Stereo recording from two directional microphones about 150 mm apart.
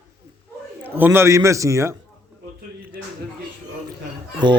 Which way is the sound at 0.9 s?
15° right (ahead or behind).